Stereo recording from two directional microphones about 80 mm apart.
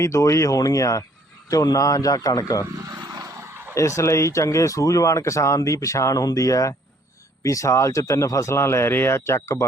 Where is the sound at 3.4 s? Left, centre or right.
Right.